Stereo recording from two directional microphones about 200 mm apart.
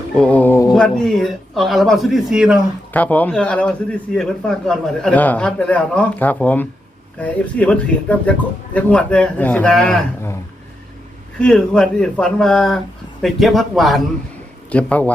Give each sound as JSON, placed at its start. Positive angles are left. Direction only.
{"t": 0.2, "sound": "mantra", "side_deg": 5}
{"t": 0.7, "sound": "a man's voice", "side_deg": 0}
{"t": 2.9, "sound": "a man's voice", "side_deg": 10}
{"t": 11.3, "sound": "a man's voice", "side_deg": 5}